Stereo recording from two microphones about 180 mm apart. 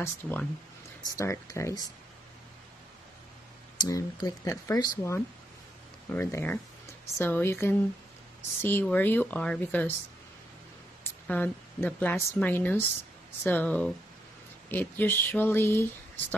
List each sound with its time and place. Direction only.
0.0 s speech: 10° left (ahead or behind)
3.8 s speech: 20° left (ahead or behind)
11.2 s speech: 10° left (ahead or behind)